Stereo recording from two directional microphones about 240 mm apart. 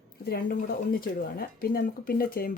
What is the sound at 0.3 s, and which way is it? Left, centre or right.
Speech, left.